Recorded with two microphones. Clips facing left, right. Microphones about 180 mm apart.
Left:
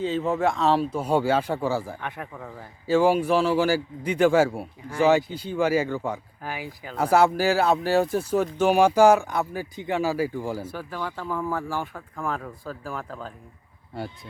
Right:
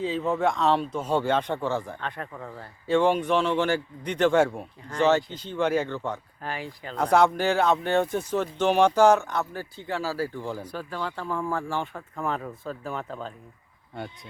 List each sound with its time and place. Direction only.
0.0 s speech: centre (ahead or behind)